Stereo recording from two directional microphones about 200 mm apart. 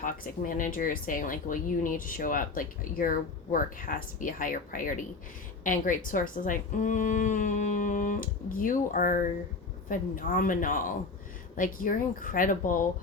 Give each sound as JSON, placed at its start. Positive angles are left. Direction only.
{"t": 0.0, "sound": "speech", "side_deg": 40}